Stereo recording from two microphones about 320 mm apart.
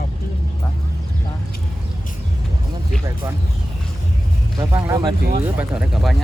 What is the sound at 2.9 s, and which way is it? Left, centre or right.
Speech, centre.